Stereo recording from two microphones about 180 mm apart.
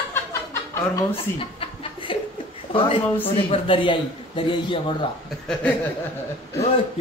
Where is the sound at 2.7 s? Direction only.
30° left (ahead or behind).